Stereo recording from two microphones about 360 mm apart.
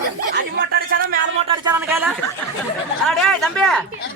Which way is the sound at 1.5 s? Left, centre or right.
Centre.